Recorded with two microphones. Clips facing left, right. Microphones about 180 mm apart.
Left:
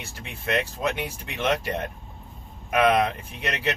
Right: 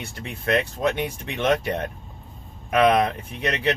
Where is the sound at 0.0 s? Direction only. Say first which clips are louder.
Right 4 dB; 5° left (ahead or behind).